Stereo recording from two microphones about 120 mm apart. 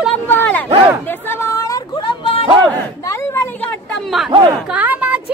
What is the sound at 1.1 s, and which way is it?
Chatter, 20° left (ahead or behind).